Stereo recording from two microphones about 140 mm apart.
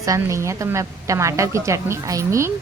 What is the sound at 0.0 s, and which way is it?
A woman's voice, 20° right (ahead or behind).